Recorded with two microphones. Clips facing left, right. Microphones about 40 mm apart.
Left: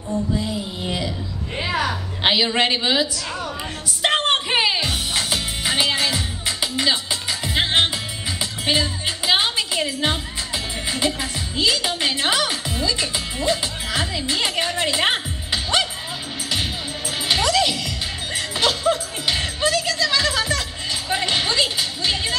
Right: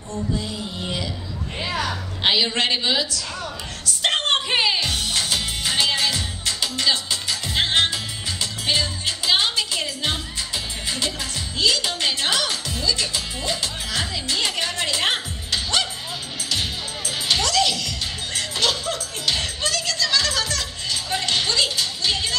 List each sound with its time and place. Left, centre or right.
0.8 s a woman's voice: centre
4.0 s music: centre
17.3 s music: centre